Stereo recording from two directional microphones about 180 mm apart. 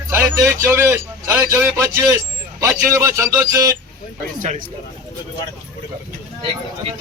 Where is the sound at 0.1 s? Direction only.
15° right (ahead or behind).